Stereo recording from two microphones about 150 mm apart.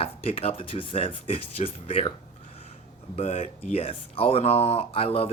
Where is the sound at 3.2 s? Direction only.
50° left (ahead or behind).